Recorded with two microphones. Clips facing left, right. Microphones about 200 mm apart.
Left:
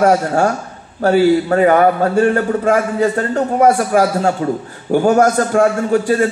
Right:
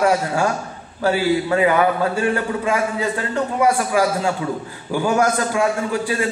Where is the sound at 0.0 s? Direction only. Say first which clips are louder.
Left 5 dB; 45° left (ahead or behind).